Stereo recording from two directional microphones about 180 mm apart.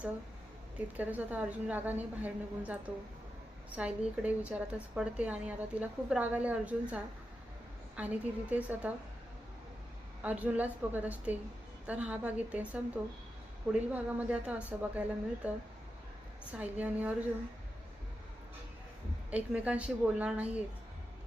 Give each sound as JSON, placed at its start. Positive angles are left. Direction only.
{"t": 0.9, "sound": "a woman's voice", "side_deg": -10}
{"t": 10.2, "sound": "a woman's voice", "side_deg": -10}
{"t": 19.3, "sound": "a woman's voice", "side_deg": -5}